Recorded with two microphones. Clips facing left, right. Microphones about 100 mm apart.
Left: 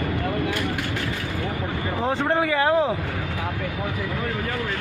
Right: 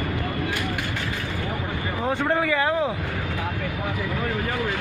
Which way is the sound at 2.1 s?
25° left (ahead or behind).